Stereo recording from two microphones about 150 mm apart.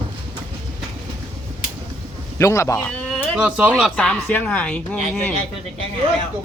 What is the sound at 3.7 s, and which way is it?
Speech, 5° left (ahead or behind).